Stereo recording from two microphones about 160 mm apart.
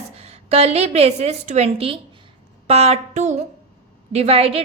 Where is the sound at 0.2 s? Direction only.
40° right (ahead or behind).